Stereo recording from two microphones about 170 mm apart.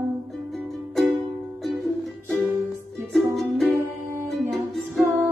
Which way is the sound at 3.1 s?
Centre (ahead or behind).